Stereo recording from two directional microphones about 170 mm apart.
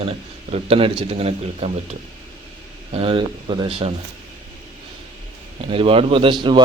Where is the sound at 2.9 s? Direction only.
30° right (ahead or behind).